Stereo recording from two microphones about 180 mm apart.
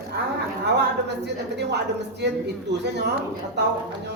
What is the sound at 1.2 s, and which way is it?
A man's voice, 70° right (ahead or behind).